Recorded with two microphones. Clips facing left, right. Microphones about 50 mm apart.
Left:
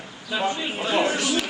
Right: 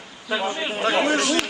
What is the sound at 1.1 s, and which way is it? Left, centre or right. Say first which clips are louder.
Speech: right 3 dB; right.